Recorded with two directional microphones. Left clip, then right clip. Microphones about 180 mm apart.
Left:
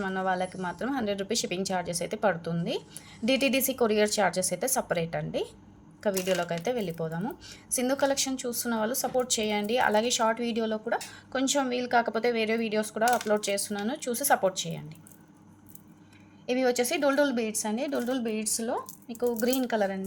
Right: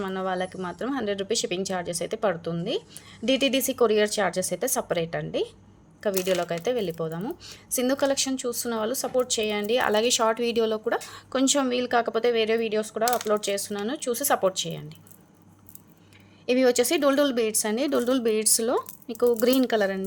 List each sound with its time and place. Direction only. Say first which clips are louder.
0.0 s a woman's voice: right 1 dB; 20° right (ahead or behind)
16.5 s a woman's voice: right 5 dB; 30° right (ahead or behind)